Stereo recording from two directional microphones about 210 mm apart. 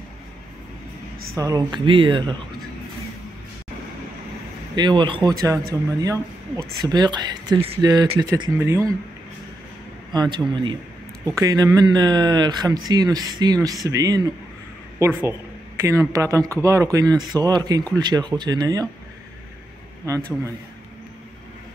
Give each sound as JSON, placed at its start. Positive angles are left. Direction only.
{"t": 1.3, "sound": "speech", "side_deg": -15}
{"t": 4.7, "sound": "speech", "side_deg": -20}
{"t": 10.1, "sound": "speech", "side_deg": -20}